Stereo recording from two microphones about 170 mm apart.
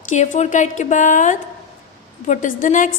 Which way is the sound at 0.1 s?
45° left (ahead or behind).